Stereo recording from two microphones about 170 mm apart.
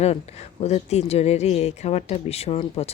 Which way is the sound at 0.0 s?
40° left (ahead or behind).